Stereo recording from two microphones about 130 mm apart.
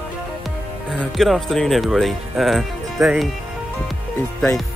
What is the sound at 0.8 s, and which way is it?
Speech, 5° left (ahead or behind).